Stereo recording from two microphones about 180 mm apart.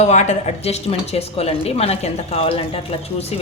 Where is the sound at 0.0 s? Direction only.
40° left (ahead or behind).